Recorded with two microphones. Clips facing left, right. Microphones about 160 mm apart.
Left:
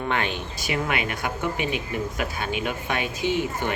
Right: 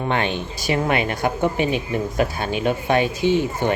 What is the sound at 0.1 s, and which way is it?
Speech, 25° right (ahead or behind).